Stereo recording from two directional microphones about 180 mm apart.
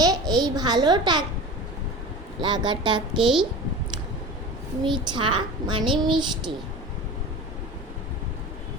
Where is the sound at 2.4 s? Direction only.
25° right (ahead or behind).